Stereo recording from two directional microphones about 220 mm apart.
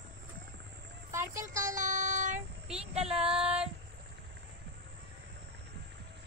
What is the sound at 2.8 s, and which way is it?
Child singing, 30° right (ahead or behind).